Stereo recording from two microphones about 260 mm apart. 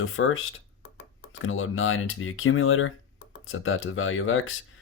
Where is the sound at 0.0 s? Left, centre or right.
Left.